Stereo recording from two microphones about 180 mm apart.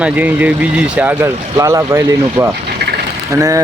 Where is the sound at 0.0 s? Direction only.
10° right (ahead or behind).